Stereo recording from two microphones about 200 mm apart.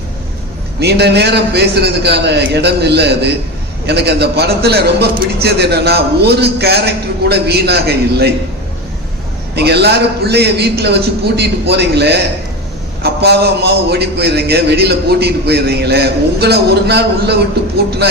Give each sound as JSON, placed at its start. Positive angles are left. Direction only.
{"t": 0.8, "sound": "a man's voice", "side_deg": -55}
{"t": 9.6, "sound": "a man's voice", "side_deg": -55}